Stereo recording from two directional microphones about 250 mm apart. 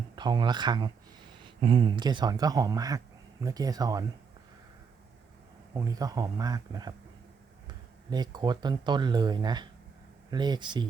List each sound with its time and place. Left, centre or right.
0.2 s speech: centre
5.7 s speech: centre
8.1 s speech: centre